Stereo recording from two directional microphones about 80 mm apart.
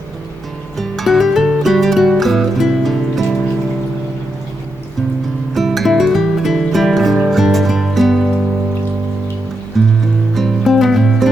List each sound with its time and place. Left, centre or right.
0.8 s music: centre
5.5 s music: centre
9.7 s music: centre